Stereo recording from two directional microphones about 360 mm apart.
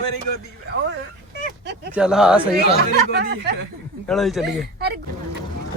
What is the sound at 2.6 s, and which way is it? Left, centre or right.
Speech, right.